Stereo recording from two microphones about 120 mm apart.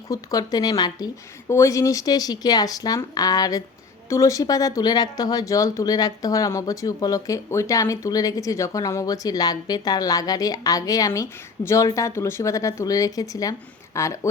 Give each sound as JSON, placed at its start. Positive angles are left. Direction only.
{"t": 0.1, "sound": "speech", "side_deg": 30}